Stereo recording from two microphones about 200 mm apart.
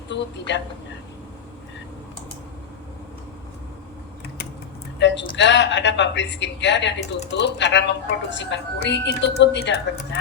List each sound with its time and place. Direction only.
0.1 s speech: 65° left (ahead or behind)
4.9 s speech: 60° left (ahead or behind)